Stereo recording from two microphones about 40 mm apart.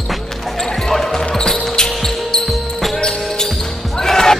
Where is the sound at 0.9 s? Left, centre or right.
Centre.